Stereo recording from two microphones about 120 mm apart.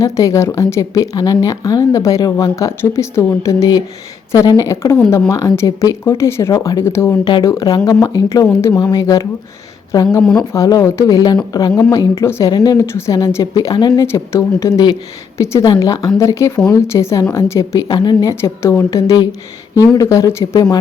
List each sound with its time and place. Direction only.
0.0 s speech: 25° left (ahead or behind)
12.5 s speech: 35° left (ahead or behind)
18.3 s speech: 25° left (ahead or behind)